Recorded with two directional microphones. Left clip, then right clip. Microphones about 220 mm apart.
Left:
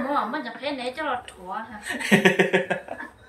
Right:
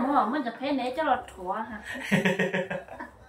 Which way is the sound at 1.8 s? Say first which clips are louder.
Left 12 dB; 30° left (ahead or behind).